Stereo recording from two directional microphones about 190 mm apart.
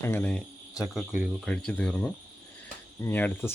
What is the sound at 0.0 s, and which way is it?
Speech, 10° left (ahead or behind).